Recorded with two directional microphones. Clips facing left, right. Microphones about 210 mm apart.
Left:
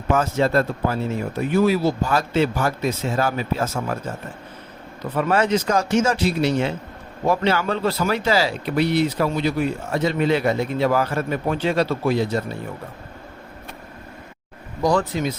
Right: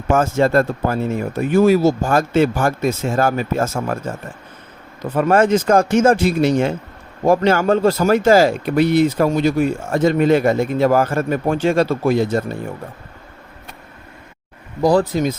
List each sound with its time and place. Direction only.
0.1 s speech: 50° right (ahead or behind)
5.1 s speech: 45° right (ahead or behind)
14.8 s speech: 35° right (ahead or behind)